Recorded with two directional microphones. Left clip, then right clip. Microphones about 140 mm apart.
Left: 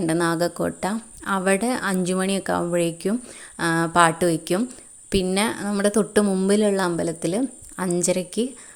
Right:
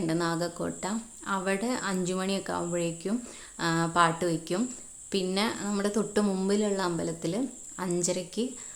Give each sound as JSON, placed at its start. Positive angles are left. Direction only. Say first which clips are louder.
{"t": 0.0, "sound": "speech", "louder": "left 8 dB", "side_deg": 55}
{"t": 6.2, "sound": "a woman's voice", "louder": "left 7 dB", "side_deg": 35}
{"t": 6.5, "sound": "speech", "louder": "left 9 dB", "side_deg": 50}